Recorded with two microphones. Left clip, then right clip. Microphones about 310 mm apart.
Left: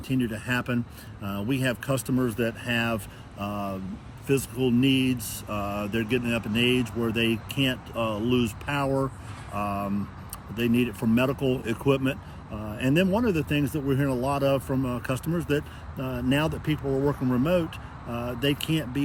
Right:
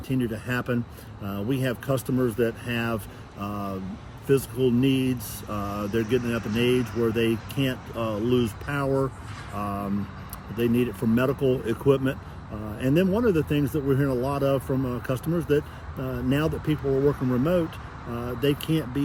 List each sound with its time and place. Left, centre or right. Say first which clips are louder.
0.1 s speech: even; centre